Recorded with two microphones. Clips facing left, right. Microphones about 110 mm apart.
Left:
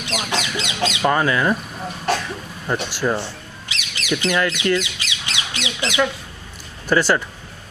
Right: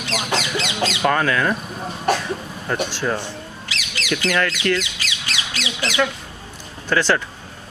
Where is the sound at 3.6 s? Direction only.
20° left (ahead or behind).